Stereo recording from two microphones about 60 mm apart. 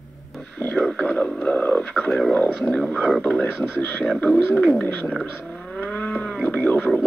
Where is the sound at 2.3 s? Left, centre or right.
Left.